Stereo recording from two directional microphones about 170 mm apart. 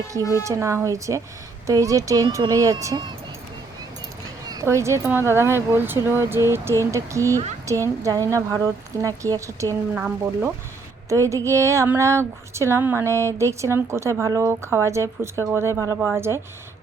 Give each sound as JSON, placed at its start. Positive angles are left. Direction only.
{"t": 0.1, "sound": "a woman's voice", "side_deg": -20}
{"t": 4.4, "sound": "a woman's voice", "side_deg": -20}
{"t": 9.9, "sound": "speech", "side_deg": -10}
{"t": 11.1, "sound": "speech", "side_deg": -20}